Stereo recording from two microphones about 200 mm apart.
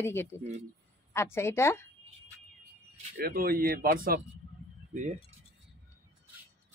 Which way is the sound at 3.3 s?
45° right (ahead or behind).